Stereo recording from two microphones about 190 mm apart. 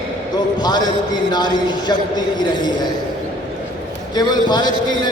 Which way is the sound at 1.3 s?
25° left (ahead or behind).